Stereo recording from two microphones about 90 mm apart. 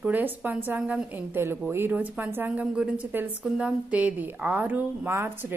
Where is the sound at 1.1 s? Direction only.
25° right (ahead or behind).